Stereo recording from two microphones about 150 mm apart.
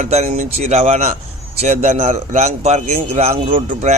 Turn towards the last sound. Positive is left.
turn(degrees=-45)  # may be behind; listen again after turning